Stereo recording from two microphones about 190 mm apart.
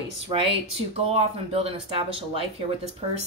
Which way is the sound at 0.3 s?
30° right (ahead or behind).